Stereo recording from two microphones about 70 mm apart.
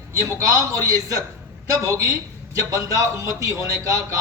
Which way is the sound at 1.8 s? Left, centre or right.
Right.